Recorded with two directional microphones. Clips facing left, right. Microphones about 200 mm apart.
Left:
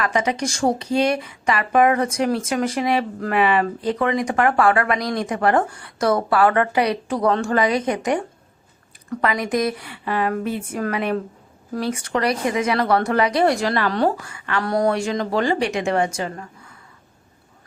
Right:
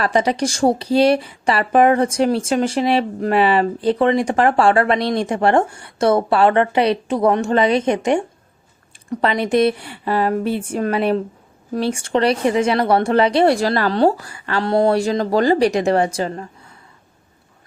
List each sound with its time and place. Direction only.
0.0 s a woman's voice: 35° right (ahead or behind)